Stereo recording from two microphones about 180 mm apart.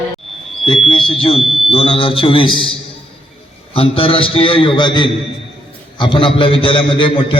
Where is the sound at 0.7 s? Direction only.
30° left (ahead or behind).